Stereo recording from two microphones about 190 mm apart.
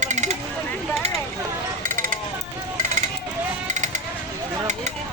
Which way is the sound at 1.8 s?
45° right (ahead or behind).